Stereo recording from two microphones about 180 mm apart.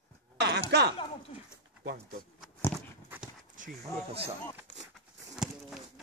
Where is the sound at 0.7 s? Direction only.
70° right (ahead or behind).